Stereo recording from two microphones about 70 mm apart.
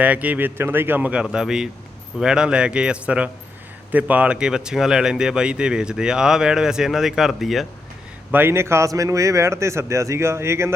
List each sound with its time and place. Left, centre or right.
0.0 s speech: right
1.2 s speech: centre
8.3 s a man's voice: right
8.9 s speech: right